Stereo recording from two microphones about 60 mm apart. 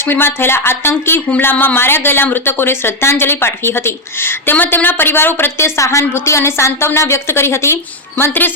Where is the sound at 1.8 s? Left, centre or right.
Left.